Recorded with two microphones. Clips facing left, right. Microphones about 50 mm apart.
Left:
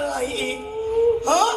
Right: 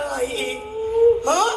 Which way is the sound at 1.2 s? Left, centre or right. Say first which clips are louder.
Even; right.